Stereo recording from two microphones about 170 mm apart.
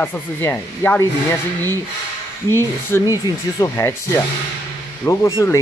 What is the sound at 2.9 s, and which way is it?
Speech, 15° left (ahead or behind).